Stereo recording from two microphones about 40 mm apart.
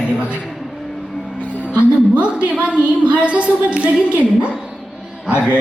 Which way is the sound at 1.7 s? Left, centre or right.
Right.